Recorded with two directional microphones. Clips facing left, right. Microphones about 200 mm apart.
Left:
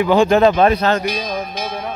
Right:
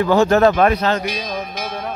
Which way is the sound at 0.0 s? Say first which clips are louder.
Left 1 dB; 15° left (ahead or behind).